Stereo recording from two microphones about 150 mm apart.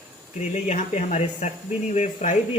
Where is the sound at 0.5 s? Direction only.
50° left (ahead or behind).